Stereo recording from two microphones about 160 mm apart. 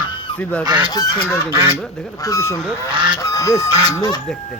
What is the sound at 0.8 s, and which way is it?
Speech, 25° left (ahead or behind).